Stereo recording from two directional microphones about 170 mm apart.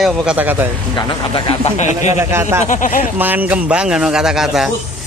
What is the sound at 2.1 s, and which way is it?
Speech, 15° right (ahead or behind).